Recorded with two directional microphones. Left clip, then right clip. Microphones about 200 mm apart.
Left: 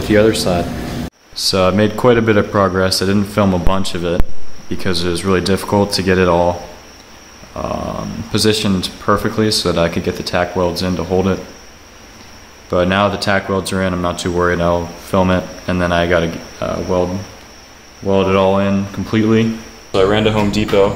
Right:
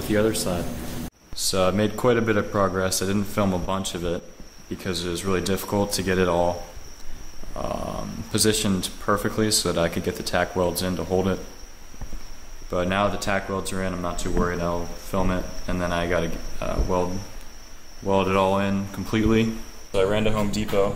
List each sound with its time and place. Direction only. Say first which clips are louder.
0.1 s speech: left 11 dB; centre (ahead or behind)
7.5 s speech: left 8 dB; 10° right (ahead or behind)
12.6 s speech: left 9 dB; centre (ahead or behind)
18.0 s speech: left 8 dB; 10° right (ahead or behind)
19.9 s speech: left 9 dB; centre (ahead or behind)